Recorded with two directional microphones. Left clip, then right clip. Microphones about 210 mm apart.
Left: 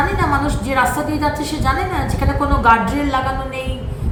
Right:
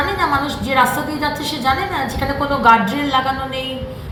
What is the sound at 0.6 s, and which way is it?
A woman's voice, 5° left (ahead or behind).